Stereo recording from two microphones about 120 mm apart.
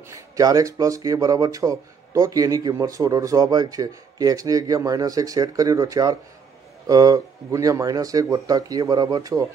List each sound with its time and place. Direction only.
0.1 s speech: 30° right (ahead or behind)